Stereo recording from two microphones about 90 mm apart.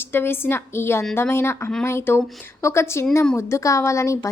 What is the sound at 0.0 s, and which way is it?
A woman's voice, 25° left (ahead or behind).